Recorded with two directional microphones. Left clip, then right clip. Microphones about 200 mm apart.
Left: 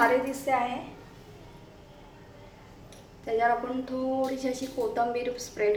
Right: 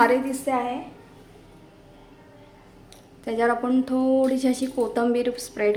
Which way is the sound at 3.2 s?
60° right (ahead or behind).